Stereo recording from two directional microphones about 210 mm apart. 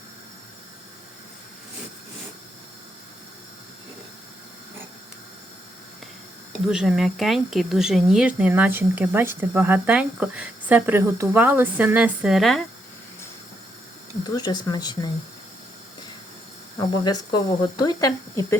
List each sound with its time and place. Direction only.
6.7 s speech: 5° right (ahead or behind)
14.3 s speech: 20° left (ahead or behind)
17.0 s speech: 20° left (ahead or behind)